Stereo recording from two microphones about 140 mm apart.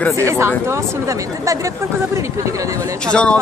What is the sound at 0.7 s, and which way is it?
Speech, 20° right (ahead or behind).